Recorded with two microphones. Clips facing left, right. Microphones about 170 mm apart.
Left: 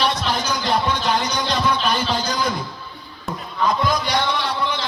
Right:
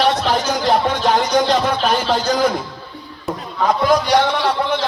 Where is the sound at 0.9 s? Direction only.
60° right (ahead or behind).